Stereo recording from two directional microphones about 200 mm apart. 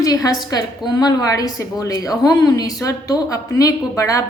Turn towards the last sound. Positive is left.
turn(degrees=15)  # may be behind; listen again after turning